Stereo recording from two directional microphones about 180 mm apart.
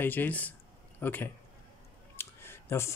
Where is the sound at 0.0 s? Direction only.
10° left (ahead or behind).